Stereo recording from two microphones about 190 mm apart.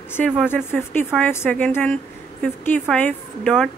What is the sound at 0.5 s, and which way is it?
A woman's voice, 10° left (ahead or behind).